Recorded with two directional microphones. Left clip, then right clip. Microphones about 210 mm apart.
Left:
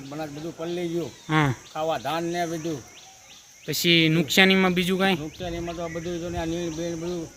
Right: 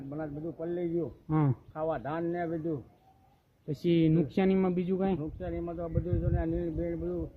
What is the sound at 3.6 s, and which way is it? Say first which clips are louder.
Speech: left 8 dB; centre (ahead or behind).